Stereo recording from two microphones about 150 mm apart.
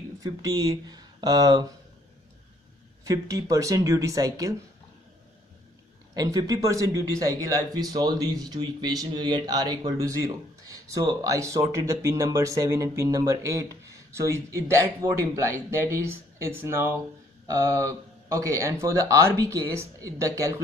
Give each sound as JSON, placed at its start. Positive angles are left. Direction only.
{"t": 0.2, "sound": "speech", "side_deg": -25}
{"t": 3.0, "sound": "speech", "side_deg": -20}
{"t": 6.1, "sound": "a man's voice", "side_deg": -25}